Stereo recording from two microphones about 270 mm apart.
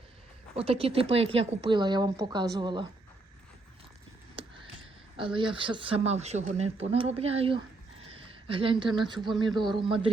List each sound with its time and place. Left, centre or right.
0.5 s speech: right
4.4 s a sound: centre
5.1 s a man's voice: centre